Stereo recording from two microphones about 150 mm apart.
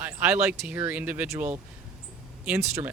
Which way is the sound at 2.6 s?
20° right (ahead or behind).